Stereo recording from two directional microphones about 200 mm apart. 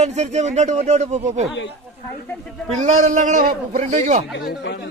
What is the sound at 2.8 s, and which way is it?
A man's voice, 40° right (ahead or behind).